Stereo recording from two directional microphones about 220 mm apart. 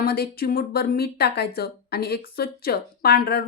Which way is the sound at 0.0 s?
45° left (ahead or behind).